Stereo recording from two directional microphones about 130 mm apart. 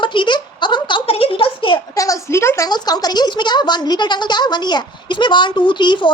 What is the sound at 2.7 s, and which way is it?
Speech, 30° left (ahead or behind).